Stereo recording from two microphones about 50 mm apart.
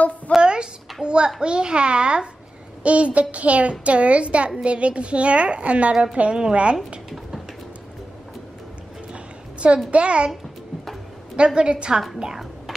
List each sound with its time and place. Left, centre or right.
0.4 s a sound: centre
1.0 s a woman's voice: centre
9.1 s a sound: right
9.8 s a woman's voice: right
11.3 s a woman's voice: centre
12.2 s music: centre